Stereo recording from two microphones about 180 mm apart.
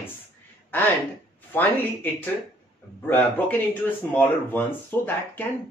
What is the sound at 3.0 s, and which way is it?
Speech, 10° left (ahead or behind).